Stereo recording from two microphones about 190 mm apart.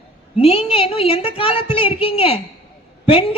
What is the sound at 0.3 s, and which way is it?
A woman's voice, 30° left (ahead or behind).